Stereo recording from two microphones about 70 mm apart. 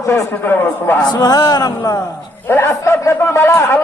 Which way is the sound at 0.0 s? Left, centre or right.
Left.